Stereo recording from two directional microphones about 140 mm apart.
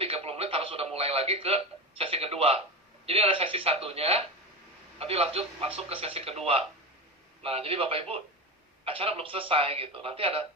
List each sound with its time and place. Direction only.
0.0 s radio: 45° right (ahead or behind)
3.1 s a man's voice: 40° right (ahead or behind)